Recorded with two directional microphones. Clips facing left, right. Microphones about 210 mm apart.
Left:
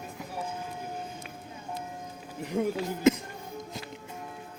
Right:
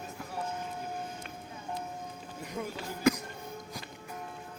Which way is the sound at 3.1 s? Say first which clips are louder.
Left 4 dB; 25° left (ahead or behind).